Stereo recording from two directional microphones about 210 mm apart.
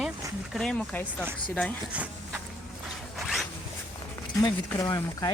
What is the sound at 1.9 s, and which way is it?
Speech, 5° right (ahead or behind).